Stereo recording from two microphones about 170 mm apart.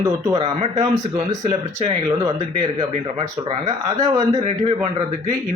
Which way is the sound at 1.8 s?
40° right (ahead or behind).